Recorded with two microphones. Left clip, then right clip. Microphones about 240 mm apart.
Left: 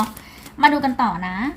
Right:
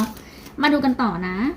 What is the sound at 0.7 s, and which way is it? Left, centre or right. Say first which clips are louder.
Speech: left 1 dB; left.